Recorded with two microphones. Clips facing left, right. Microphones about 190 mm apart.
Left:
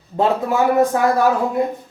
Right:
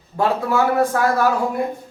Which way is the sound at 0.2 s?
20° left (ahead or behind).